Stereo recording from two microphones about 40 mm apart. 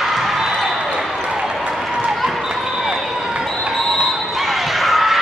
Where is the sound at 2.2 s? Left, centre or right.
Centre.